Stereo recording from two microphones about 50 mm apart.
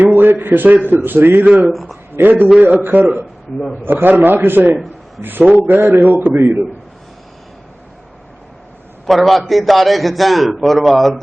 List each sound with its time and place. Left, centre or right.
0.0 s a sound: right
0.9 s a man's voice: right
1.7 s a man's voice: centre
2.1 s a man's voice: right
9.0 s a man's voice: centre